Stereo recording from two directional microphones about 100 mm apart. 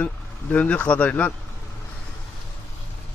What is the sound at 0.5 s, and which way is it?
Speech, 15° left (ahead or behind).